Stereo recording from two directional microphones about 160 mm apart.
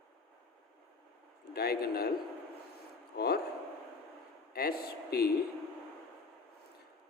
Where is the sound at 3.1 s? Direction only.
90° left.